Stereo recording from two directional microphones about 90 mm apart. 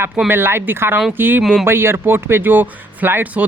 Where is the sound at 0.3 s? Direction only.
25° right (ahead or behind).